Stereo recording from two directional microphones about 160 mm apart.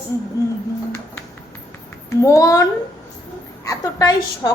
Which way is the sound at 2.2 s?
20° left (ahead or behind).